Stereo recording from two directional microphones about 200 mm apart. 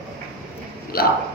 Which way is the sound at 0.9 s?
50° left (ahead or behind).